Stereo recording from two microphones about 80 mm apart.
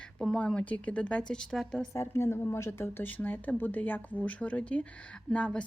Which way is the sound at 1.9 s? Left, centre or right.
Left.